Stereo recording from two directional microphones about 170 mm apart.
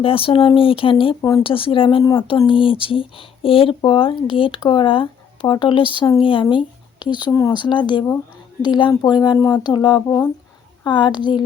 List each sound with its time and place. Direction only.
0.0 s speech: 30° left (ahead or behind)